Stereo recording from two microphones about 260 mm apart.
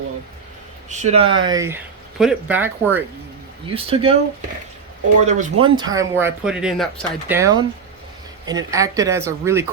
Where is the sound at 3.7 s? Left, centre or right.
Right.